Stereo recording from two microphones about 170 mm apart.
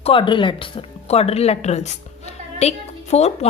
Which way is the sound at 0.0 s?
30° left (ahead or behind).